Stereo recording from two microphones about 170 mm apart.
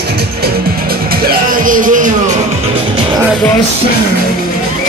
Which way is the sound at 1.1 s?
60° right (ahead or behind).